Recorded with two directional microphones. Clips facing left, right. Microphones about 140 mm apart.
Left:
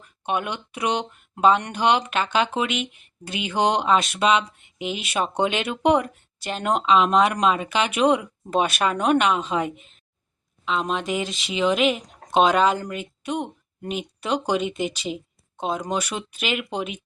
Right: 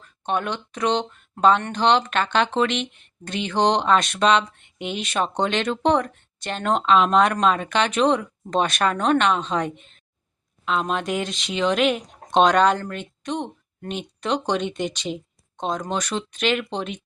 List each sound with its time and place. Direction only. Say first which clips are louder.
0.0 s speech: right 1 dB; 10° left (ahead or behind)